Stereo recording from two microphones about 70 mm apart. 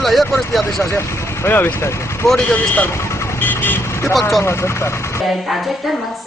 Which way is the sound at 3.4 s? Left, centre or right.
Left.